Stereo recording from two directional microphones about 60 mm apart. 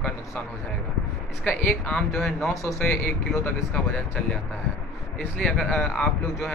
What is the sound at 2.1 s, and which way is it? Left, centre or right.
Speech, centre.